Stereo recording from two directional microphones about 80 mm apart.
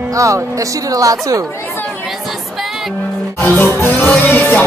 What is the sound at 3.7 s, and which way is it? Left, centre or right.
Music, left.